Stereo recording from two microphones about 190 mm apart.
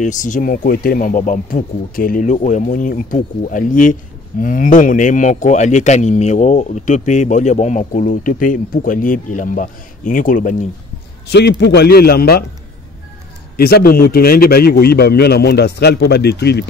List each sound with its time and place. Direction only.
0.0 s speech: 40° left (ahead or behind)
11.2 s a man's voice: 60° left (ahead or behind)
13.6 s a man's voice: 55° left (ahead or behind)